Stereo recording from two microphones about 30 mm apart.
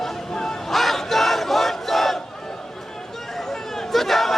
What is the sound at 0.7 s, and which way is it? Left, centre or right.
Battle cry, centre.